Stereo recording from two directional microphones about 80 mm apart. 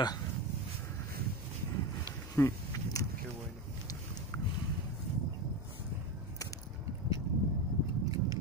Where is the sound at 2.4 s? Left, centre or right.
Left.